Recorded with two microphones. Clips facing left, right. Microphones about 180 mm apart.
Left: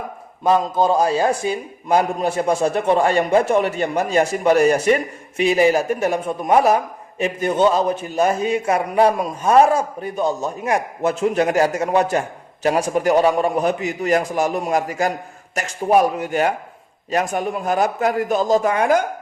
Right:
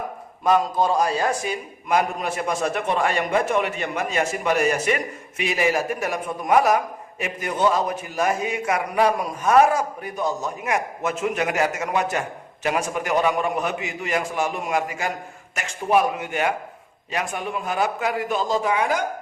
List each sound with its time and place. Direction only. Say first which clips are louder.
0.4 s a man's voice: left 3 dB; 25° left (ahead or behind); by 19.0 s 50° left (ahead or behind)